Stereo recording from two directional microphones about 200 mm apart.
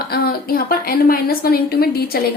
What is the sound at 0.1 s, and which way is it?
A woman's voice, 50° left (ahead or behind).